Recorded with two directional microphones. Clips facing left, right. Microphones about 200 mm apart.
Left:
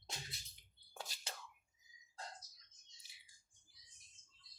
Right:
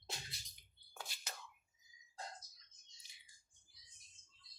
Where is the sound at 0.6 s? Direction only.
35° left (ahead or behind).